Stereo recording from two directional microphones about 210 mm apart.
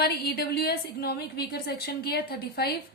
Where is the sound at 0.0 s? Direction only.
50° left (ahead or behind).